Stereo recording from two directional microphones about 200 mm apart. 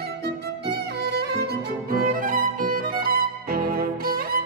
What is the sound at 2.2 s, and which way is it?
Violin, 45° right (ahead or behind).